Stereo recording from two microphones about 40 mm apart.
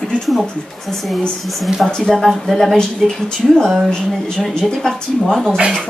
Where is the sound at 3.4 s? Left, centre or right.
Centre.